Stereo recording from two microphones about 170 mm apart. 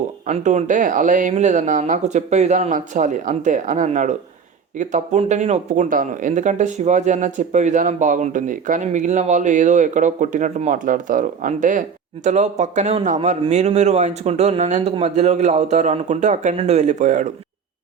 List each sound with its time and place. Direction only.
0.3 s speech: 45° right (ahead or behind)